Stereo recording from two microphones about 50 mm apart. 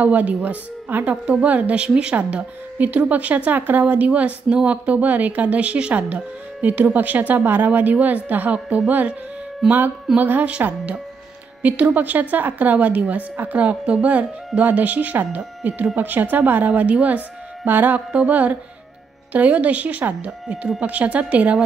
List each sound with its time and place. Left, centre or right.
0.0 s a woman's voice: right
11.6 s a woman's voice: right